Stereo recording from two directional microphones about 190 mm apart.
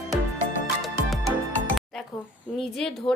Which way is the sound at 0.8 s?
Centre (ahead or behind).